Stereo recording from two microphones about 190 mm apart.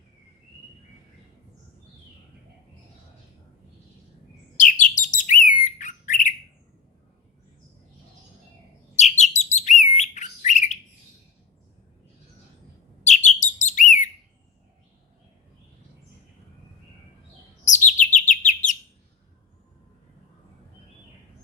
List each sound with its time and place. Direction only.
4.5 s bird: 40° left (ahead or behind)
9.0 s bird: 35° left (ahead or behind)
13.1 s bird: 40° left (ahead or behind)
17.7 s chirp: 40° left (ahead or behind)